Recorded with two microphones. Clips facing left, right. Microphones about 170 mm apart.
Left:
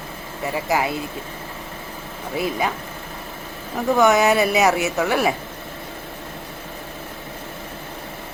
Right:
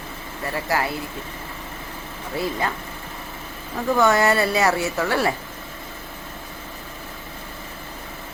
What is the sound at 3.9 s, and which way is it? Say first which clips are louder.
A woman's voice: left 2 dB; 15° left (ahead or behind).